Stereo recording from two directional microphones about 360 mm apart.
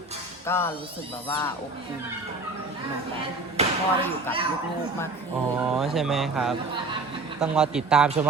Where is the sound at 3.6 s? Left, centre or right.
Centre.